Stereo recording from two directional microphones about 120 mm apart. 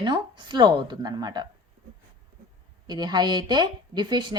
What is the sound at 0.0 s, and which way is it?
A woman's voice, 40° right (ahead or behind).